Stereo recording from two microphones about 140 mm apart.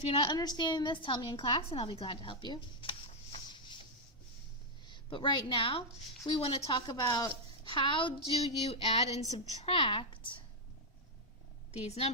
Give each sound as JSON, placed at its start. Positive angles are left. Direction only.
{"t": 0.1, "sound": "a woman's voice", "side_deg": 40}
{"t": 0.3, "sound": "a woman's voice", "side_deg": 30}
{"t": 3.3, "sound": "a sound", "side_deg": 35}
{"t": 4.9, "sound": "a woman's voice", "side_deg": 35}
{"t": 8.3, "sound": "a woman's voice", "side_deg": 45}
{"t": 11.7, "sound": "a woman's voice", "side_deg": 50}